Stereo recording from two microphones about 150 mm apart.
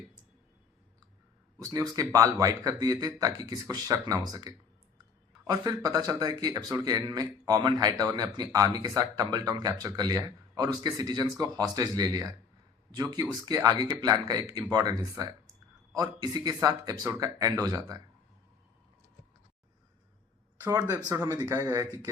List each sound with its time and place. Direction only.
1.6 s speech: 25° right (ahead or behind)
20.7 s speech: 20° right (ahead or behind)